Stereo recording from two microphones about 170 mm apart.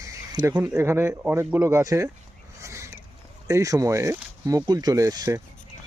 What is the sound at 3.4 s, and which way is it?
Speech, 20° right (ahead or behind).